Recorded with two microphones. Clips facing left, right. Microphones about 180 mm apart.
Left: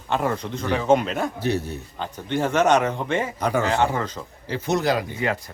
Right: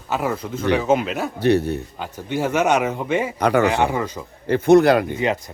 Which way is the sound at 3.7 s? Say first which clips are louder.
Right 2 dB; 15° right (ahead or behind).